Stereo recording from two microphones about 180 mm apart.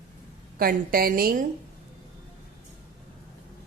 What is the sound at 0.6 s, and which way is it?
Speech, 55° right (ahead or behind).